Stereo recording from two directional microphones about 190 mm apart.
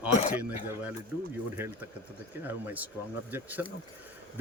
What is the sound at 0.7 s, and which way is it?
A man's voice, 10° right (ahead or behind).